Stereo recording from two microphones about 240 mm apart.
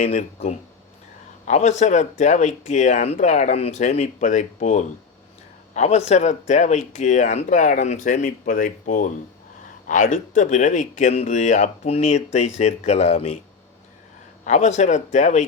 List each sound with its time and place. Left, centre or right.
0.0 s speech: left
14.4 s speech: left